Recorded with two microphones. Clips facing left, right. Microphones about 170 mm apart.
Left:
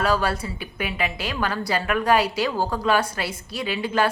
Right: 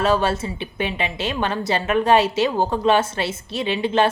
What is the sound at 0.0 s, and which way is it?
A woman's voice, 25° right (ahead or behind).